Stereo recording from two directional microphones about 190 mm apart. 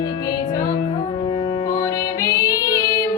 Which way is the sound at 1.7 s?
15° left (ahead or behind).